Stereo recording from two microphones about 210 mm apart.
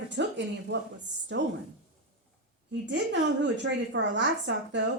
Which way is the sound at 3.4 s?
60° right (ahead or behind).